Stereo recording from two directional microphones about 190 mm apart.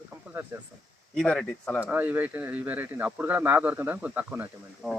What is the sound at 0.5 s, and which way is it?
Speech, 15° right (ahead or behind).